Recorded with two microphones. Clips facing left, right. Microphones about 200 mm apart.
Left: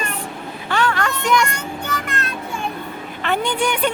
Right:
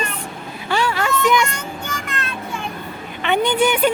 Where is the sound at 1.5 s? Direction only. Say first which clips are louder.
Left 2 dB; 60° left (ahead or behind).